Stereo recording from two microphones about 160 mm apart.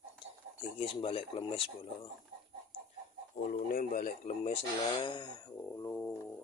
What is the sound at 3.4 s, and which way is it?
Speech, 60° left (ahead or behind).